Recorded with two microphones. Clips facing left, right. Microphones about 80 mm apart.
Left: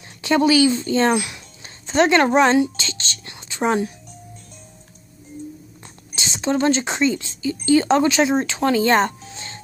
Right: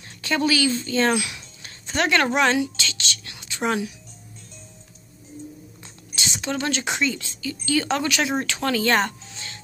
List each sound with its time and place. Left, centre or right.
0.2 s speech: left
6.1 s speech: left
9.3 s music: left